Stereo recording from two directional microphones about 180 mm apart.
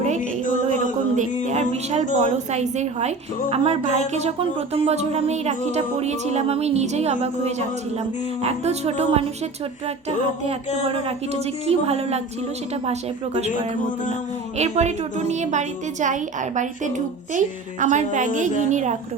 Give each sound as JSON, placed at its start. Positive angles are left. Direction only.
{"t": 0.7, "sound": "speech", "side_deg": -45}
{"t": 2.2, "sound": "music", "side_deg": -40}
{"t": 10.8, "sound": "music", "side_deg": -35}
{"t": 13.7, "sound": "a sound", "side_deg": 45}
{"t": 14.6, "sound": "a woman's voice", "side_deg": -40}